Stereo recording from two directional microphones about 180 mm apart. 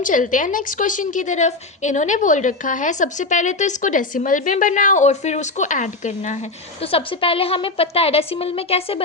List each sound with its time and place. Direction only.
0.0 s a woman's voice: 45° left (ahead or behind)
6.8 s a woman's voice: 30° left (ahead or behind)